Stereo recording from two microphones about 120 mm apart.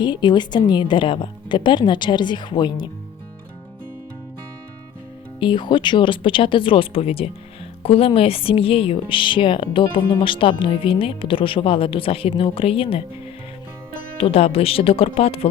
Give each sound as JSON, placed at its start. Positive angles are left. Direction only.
{"t": 0.0, "sound": "a woman's voice", "side_deg": 40}
{"t": 5.4, "sound": "speech", "side_deg": 40}
{"t": 14.2, "sound": "speech", "side_deg": 55}